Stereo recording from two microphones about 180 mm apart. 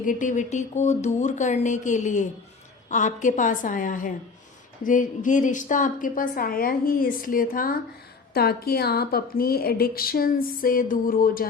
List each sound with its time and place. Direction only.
0.0 s a woman's voice: 45° left (ahead or behind)